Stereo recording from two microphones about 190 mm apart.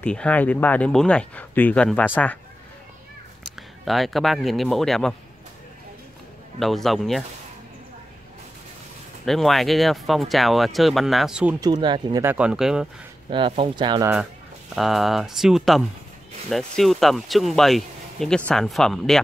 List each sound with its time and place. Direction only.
0.0 s speech: 5° left (ahead or behind)
3.8 s speech: centre (ahead or behind)
6.6 s speech: centre (ahead or behind)
9.2 s speech: centre (ahead or behind)
11.6 s speech: 25° right (ahead or behind); by 12.8 s 5° right (ahead or behind)
13.3 s speech: 30° right (ahead or behind)
14.8 s speech: centre (ahead or behind)